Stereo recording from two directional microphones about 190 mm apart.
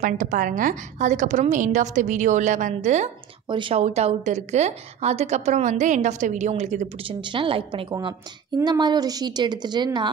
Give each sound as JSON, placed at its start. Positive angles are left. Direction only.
{"t": 0.0, "sound": "a woman's voice", "side_deg": -45}
{"t": 3.4, "sound": "a woman's voice", "side_deg": -25}